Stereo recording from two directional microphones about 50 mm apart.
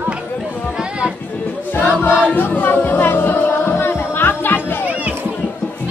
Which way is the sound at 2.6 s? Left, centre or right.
Left.